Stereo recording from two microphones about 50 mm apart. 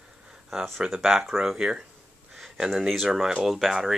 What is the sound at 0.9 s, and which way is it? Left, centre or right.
Speech, centre.